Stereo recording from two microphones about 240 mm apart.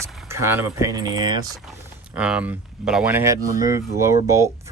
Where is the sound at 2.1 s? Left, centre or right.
Centre.